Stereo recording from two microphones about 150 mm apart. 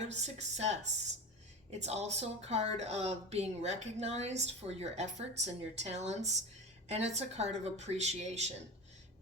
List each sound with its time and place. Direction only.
0.0 s a woman's voice: 50° right (ahead or behind)